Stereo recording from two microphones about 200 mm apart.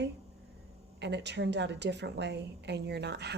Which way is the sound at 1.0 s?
60° right (ahead or behind).